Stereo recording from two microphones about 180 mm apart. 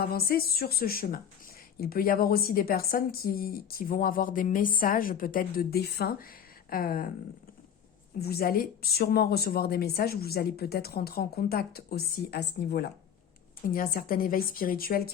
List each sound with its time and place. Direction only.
0.0 s a woman's voice: 55° left (ahead or behind)
8.2 s a woman's voice: 60° left (ahead or behind)
13.7 s a woman's voice: 50° left (ahead or behind)